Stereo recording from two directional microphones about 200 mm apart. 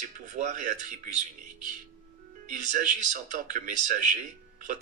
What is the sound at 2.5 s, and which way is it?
Speech, 40° right (ahead or behind).